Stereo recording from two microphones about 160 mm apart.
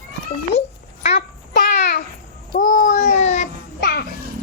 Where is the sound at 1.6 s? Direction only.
60° left (ahead or behind).